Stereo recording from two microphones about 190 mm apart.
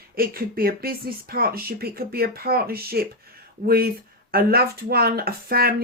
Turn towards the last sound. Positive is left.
turn(degrees=-50)  # may be behind; listen again after turning